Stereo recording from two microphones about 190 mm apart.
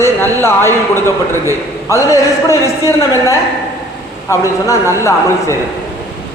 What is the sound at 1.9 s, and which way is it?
A man's voice, 15° left (ahead or behind).